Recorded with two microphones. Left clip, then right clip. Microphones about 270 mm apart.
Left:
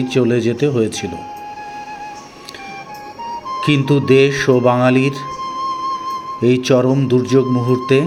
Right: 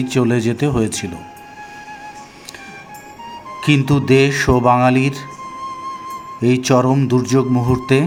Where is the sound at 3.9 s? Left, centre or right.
Centre.